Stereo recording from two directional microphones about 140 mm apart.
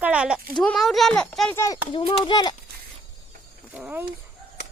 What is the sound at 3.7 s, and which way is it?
Speech, 10° right (ahead or behind).